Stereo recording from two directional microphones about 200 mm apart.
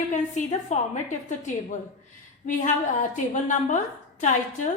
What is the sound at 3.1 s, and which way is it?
Speech, 40° left (ahead or behind).